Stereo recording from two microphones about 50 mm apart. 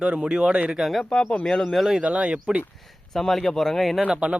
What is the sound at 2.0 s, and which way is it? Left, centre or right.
Speech, right.